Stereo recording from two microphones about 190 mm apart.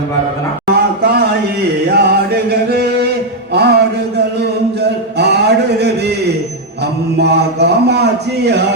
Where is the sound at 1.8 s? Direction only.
60° right (ahead or behind).